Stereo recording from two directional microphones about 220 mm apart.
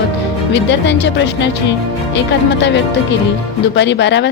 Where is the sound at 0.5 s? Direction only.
55° left (ahead or behind).